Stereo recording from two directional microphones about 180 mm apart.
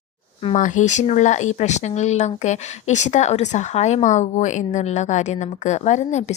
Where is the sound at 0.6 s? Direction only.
45° left (ahead or behind).